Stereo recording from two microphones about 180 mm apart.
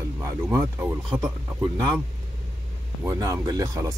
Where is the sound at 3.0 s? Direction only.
20° right (ahead or behind).